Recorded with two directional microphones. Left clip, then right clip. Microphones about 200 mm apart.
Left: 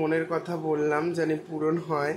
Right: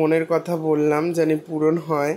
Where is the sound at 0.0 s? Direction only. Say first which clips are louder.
Right 7 dB; 35° right (ahead or behind).